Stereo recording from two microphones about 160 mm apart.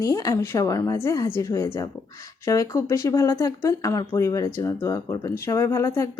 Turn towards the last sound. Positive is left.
turn(degrees=20)  # may be behind; listen again after turning